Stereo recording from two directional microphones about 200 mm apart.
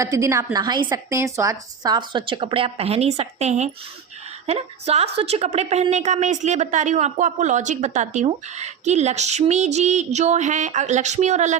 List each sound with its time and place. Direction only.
0.0 s a woman's voice: 15° right (ahead or behind); by 11.5 s 35° right (ahead or behind)